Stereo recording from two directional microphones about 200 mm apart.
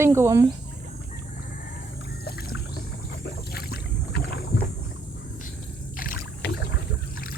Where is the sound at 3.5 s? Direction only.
50° left (ahead or behind).